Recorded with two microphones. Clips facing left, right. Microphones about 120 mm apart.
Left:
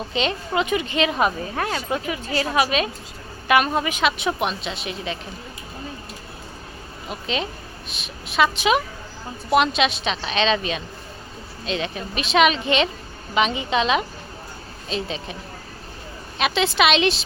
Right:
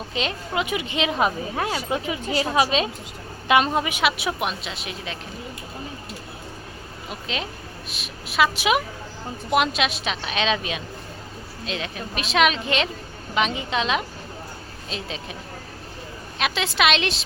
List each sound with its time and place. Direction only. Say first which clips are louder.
0.1 s a woman's voice: left 3 dB; 5° right (ahead or behind)
7.1 s speech: left 4 dB; centre (ahead or behind)
16.4 s speech: left 3 dB; centre (ahead or behind)